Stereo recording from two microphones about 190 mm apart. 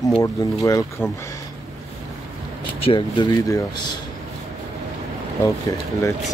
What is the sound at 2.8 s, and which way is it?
Speech, 25° left (ahead or behind).